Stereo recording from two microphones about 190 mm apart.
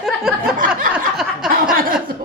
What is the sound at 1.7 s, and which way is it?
Speech, 50° right (ahead or behind).